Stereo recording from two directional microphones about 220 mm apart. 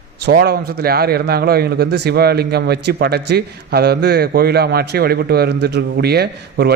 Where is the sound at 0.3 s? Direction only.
45° right (ahead or behind).